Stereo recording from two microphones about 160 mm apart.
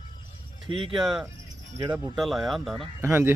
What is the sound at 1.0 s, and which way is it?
Speech, 5° right (ahead or behind).